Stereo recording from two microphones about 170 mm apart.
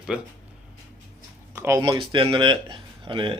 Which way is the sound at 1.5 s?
15° right (ahead or behind).